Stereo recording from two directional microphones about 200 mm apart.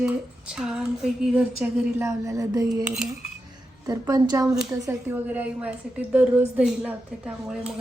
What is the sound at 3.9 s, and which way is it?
A woman's voice, 20° right (ahead or behind).